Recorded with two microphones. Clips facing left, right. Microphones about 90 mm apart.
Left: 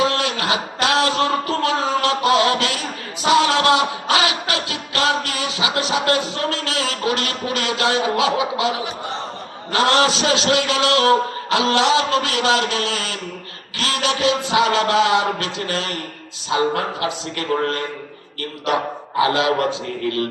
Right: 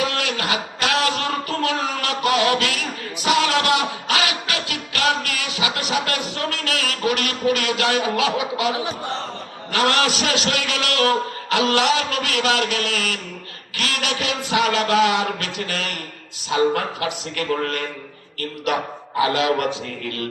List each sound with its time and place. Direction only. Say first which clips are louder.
0.0 s a sound: left 4 dB; 25° left (ahead or behind)
3.2 s music: left 3 dB; 25° left (ahead or behind)
9.7 s a man's voice: left 3 dB; 25° left (ahead or behind)
19.2 s a man's voice: left 2 dB; 25° left (ahead or behind)